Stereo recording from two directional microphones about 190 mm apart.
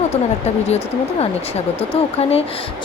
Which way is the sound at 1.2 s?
30° left (ahead or behind).